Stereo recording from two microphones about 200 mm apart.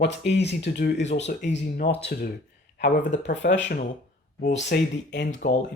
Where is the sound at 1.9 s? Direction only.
55° left (ahead or behind).